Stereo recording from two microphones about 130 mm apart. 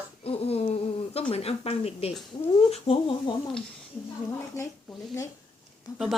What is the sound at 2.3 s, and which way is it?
Speech, 35° left (ahead or behind).